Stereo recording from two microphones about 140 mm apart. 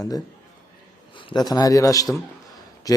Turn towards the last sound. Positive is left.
turn(degrees=25)  # may be behind; listen again after turning